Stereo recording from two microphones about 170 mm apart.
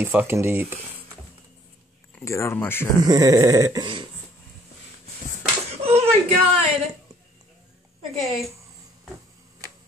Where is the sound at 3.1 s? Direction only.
20° right (ahead or behind).